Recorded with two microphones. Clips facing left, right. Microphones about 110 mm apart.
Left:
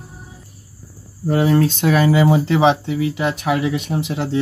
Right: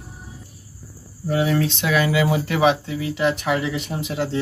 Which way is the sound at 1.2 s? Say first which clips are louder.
Left 5 dB; 40° left (ahead or behind).